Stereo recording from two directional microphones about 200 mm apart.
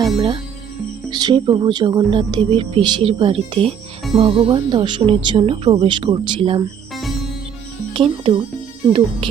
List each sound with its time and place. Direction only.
1.1 s speech: 20° right (ahead or behind)
6.9 s music: centre (ahead or behind)
7.9 s speech: 25° right (ahead or behind)